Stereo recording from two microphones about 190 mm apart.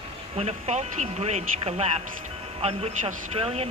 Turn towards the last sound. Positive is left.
turn(degrees=-30)  # may be behind; listen again after turning